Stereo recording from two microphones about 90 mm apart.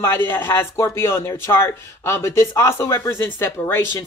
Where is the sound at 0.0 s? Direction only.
25° left (ahead or behind).